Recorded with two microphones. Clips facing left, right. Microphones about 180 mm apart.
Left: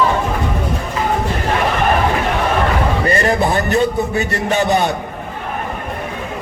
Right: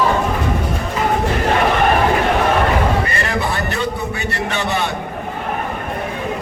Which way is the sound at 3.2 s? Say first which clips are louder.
Left 5 dB; 40° left (ahead or behind).